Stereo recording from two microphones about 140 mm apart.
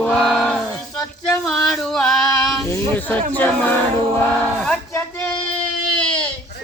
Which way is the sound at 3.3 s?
10° left (ahead or behind).